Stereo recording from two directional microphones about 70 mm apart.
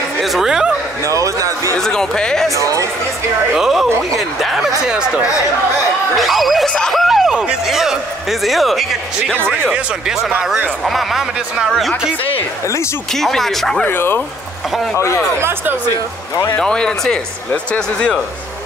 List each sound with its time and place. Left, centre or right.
0.2 s speech: centre
1.0 s speech: right
1.8 s speech: centre
2.5 s speech: right
3.5 s speech: centre
4.8 s speech: centre
6.1 s speech: centre
13.1 s speech: centre
13.8 s speech: left
15.0 s speech: left
15.3 s speech: right
16.5 s speech: centre